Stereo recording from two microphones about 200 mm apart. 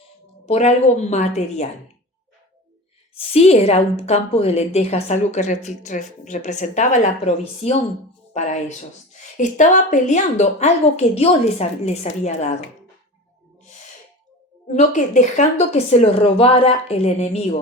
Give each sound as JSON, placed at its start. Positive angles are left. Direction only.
{"t": 0.4, "sound": "a woman's voice", "side_deg": 35}
{"t": 3.2, "sound": "a woman's voice", "side_deg": 30}
{"t": 14.7, "sound": "a woman's voice", "side_deg": 40}